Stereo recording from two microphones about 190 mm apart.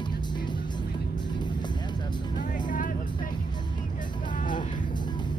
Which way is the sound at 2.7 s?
45° left (ahead or behind).